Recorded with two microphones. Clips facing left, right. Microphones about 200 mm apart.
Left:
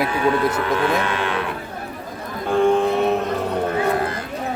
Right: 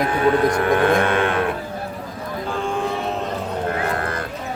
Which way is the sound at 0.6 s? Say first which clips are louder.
Right 3 dB; 50° right (ahead or behind).